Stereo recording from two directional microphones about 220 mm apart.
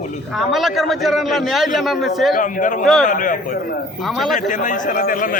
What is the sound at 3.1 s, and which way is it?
A man's voice, 35° left (ahead or behind).